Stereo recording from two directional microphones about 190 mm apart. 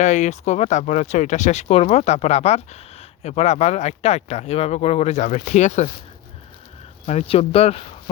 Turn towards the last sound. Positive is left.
turn(degrees=30)  # may be behind; listen again after turning